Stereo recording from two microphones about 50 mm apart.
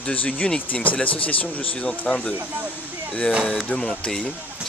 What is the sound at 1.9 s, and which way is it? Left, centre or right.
Speech, centre.